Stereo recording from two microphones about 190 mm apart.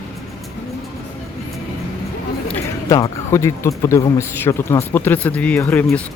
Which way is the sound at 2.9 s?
15° left (ahead or behind).